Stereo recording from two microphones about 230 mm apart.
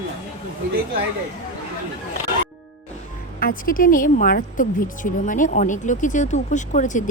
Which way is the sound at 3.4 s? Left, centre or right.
Left.